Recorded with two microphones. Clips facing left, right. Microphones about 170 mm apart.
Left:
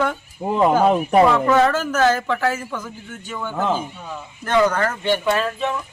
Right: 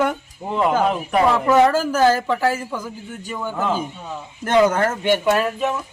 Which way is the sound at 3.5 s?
15° left (ahead or behind).